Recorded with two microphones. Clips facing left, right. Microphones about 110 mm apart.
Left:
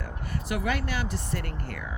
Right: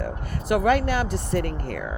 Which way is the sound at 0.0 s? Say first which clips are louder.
Right 5 dB; 50° right (ahead or behind).